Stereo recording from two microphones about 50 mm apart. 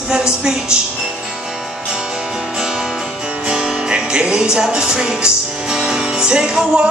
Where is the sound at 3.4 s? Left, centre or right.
Centre.